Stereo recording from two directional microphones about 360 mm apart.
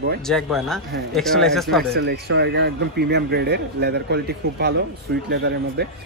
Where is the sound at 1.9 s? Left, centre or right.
Right.